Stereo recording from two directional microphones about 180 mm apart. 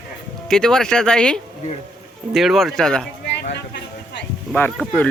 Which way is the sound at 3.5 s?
75° left (ahead or behind).